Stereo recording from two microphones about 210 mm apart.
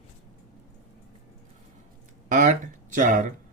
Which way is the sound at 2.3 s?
35° right (ahead or behind).